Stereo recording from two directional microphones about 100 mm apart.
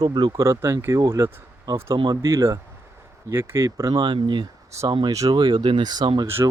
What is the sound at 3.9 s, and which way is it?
Speech, 50° right (ahead or behind).